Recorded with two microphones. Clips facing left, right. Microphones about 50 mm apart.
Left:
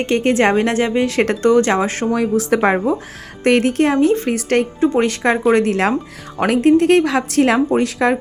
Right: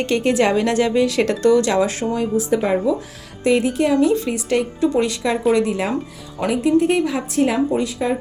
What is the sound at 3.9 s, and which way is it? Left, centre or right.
A woman's voice, left.